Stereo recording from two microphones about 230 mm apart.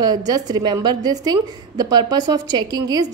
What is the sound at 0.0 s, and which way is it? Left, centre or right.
A woman's voice, centre.